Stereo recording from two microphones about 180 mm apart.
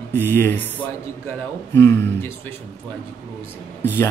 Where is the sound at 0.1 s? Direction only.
10° left (ahead or behind).